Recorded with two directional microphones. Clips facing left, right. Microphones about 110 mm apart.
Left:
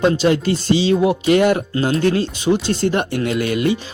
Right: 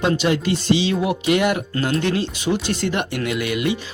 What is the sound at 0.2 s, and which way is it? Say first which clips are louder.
Speech: left 3 dB; 35° left (ahead or behind).